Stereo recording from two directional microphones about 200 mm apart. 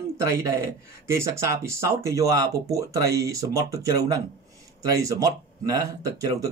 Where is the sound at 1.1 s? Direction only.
15° right (ahead or behind).